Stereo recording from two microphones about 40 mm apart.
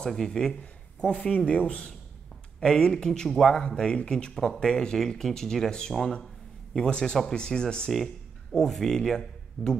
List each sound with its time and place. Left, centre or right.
0.0 s speech: centre
1.0 s speech: left
2.6 s speech: centre
7.9 s speech: centre